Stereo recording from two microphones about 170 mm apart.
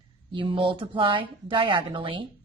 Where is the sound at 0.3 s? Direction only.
30° right (ahead or behind).